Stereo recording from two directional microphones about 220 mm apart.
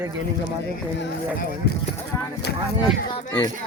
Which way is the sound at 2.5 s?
50° left (ahead or behind).